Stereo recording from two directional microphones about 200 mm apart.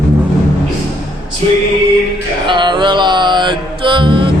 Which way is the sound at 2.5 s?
25° right (ahead or behind).